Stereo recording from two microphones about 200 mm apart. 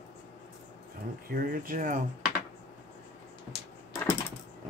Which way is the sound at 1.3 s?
45° right (ahead or behind).